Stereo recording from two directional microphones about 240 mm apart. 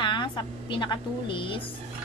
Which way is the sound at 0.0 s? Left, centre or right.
Centre.